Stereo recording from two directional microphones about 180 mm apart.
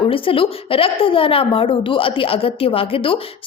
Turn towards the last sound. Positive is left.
turn(degrees=30)  # may be behind; listen again after turning